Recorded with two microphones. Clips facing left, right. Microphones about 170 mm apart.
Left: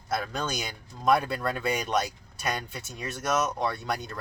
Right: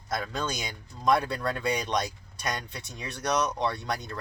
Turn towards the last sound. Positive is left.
turn(degrees=5)  # may be behind; listen again after turning